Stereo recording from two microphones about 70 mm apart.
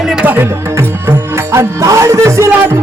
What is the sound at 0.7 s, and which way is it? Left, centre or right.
Music, right.